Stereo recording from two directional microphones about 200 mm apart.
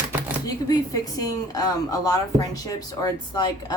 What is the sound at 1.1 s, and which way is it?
Speech, 20° left (ahead or behind).